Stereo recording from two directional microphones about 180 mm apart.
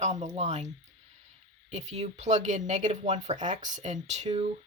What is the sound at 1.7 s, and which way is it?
Speech, 40° right (ahead or behind).